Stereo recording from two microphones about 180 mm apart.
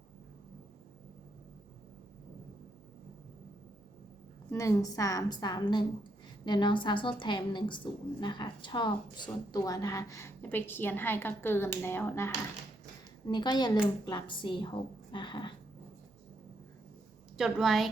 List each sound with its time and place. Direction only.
4.5 s a woman's voice: 20° left (ahead or behind)
13.2 s a woman's voice: 25° left (ahead or behind)
17.3 s a woman's voice: centre (ahead or behind)